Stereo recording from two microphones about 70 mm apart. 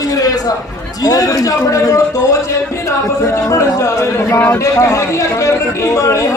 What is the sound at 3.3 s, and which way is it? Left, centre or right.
A man's voice, left.